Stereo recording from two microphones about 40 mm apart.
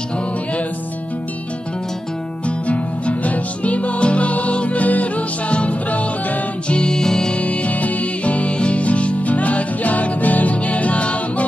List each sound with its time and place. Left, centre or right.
2.6 s music: left
6.7 s music: centre
7.3 s music: left